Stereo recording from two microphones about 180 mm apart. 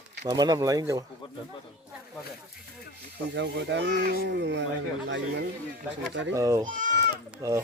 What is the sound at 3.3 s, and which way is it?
Speech, 75° right (ahead or behind).